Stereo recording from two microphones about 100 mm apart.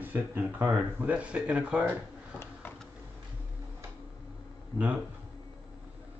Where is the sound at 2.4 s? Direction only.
20° left (ahead or behind).